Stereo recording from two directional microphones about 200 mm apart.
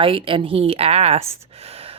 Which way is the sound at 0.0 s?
25° right (ahead or behind).